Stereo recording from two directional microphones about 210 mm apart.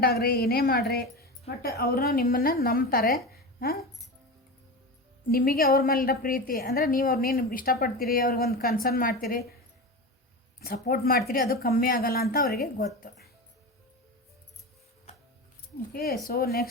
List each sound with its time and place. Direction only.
0.0 s a woman's voice: 50° left (ahead or behind)
5.3 s a woman's voice: 45° left (ahead or behind)
10.8 s a woman's voice: 45° left (ahead or behind)
15.9 s a woman's voice: 45° left (ahead or behind)